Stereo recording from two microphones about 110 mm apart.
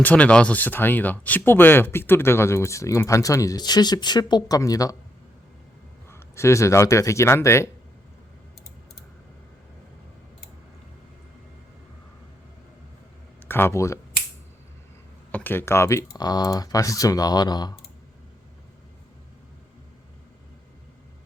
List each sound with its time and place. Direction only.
0.0 s speech: 10° left (ahead or behind); by 4.9 s 30° left (ahead or behind)
6.1 s speech: 25° left (ahead or behind)
13.5 s speech: 20° left (ahead or behind)
15.3 s speech: 15° left (ahead or behind); by 17.7 s 40° left (ahead or behind)